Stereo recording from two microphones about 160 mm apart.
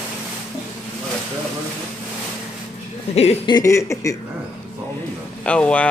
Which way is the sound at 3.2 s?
40° left (ahead or behind).